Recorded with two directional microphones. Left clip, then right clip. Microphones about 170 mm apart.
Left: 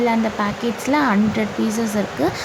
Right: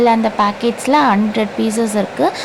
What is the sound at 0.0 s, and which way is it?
Speech, 25° right (ahead or behind).